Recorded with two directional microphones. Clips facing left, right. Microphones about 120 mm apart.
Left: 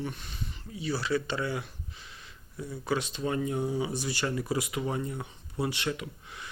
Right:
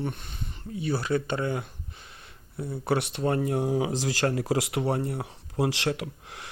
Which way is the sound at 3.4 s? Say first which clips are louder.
Right 4 dB; 80° right.